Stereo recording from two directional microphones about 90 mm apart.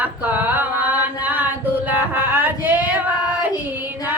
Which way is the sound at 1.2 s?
20° right (ahead or behind).